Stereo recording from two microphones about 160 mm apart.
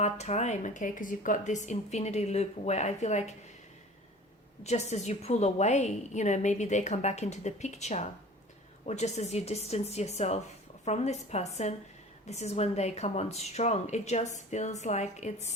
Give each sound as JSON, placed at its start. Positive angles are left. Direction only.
{"t": 0.0, "sound": "a woman's voice", "side_deg": 45}
{"t": 4.6, "sound": "a woman's voice", "side_deg": 45}